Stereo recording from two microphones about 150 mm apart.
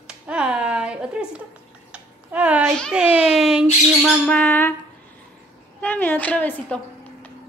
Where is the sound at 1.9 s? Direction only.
10° right (ahead or behind).